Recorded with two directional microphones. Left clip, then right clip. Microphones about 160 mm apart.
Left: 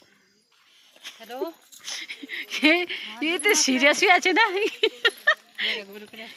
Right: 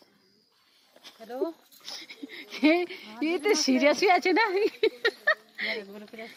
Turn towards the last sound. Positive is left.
turn(degrees=-70)  # may be behind; listen again after turning